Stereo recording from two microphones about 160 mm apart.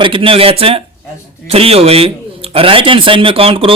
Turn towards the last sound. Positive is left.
turn(degrees=-35)  # may be behind; listen again after turning